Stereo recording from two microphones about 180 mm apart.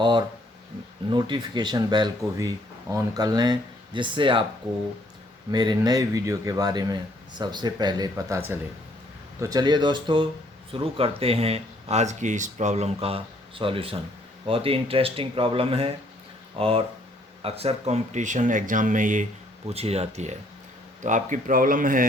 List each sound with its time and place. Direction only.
0.0 s speech: 25° right (ahead or behind)
5.5 s speech: 25° right (ahead or behind); by 22.0 s 50° right (ahead or behind)